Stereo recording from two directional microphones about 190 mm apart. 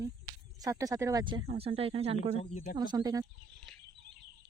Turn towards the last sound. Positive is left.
turn(degrees=-20)  # may be behind; listen again after turning